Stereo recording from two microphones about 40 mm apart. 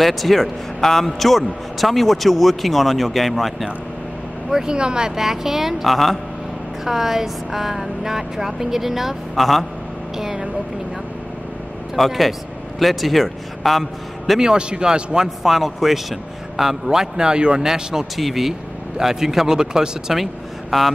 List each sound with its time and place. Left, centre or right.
0.0 s a man's voice: centre
4.5 s a woman's voice: centre
6.8 s a woman's voice: centre
10.1 s a sound: centre
11.9 s a man's voice: centre
14.4 s a man's voice: centre
15.4 s a woman's voice: centre
20.7 s a man's voice: centre